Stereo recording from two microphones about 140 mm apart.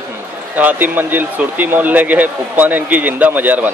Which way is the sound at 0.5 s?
10° right (ahead or behind).